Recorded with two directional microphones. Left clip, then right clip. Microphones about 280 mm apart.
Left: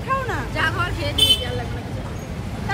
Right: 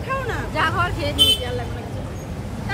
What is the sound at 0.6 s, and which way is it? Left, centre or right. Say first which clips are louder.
Vehicle: right 2 dB; right.